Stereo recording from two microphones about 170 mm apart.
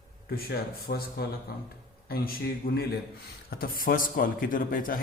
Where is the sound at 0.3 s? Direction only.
65° left (ahead or behind).